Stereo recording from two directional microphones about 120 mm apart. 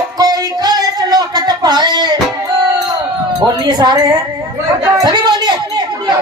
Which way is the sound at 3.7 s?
35° right (ahead or behind).